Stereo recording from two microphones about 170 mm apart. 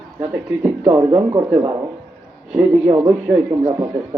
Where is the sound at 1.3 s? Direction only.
20° right (ahead or behind).